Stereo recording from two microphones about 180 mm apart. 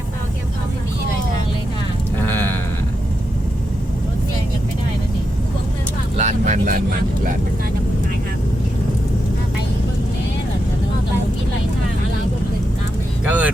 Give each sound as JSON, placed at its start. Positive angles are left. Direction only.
{"t": 2.2, "sound": "a sound", "side_deg": 10}
{"t": 6.1, "sound": "vehicle", "side_deg": -40}
{"t": 13.2, "sound": "vehicle", "side_deg": -10}